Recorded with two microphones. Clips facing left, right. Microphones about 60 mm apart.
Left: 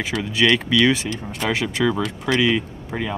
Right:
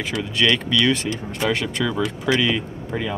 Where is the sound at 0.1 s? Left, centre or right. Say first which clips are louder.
Left 2 dB; centre.